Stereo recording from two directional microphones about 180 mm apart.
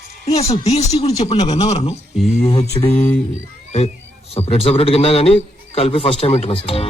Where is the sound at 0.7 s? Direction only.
35° left (ahead or behind).